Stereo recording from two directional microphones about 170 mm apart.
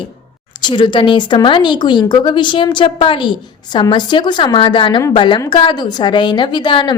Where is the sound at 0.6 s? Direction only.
30° left (ahead or behind).